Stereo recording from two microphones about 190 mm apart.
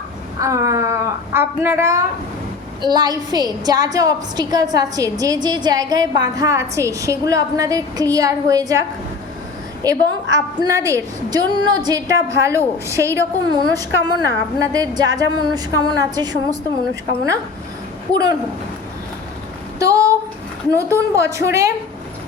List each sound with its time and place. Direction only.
0.3 s a woman's voice: 15° right (ahead or behind)
9.8 s a woman's voice: 20° right (ahead or behind)
19.8 s a sound: 15° right (ahead or behind)
20.7 s a woman's voice: 15° right (ahead or behind)